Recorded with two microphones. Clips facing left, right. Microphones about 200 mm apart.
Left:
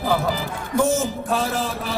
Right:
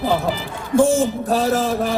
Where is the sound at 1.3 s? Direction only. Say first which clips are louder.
Right 5 dB; 40° right (ahead or behind).